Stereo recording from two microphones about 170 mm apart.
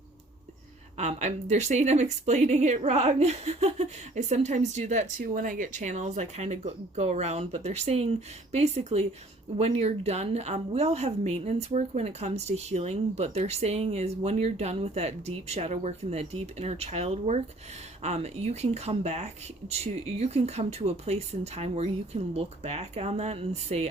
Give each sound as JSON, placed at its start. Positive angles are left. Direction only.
{"t": 0.9, "sound": "a woman's voice", "side_deg": -40}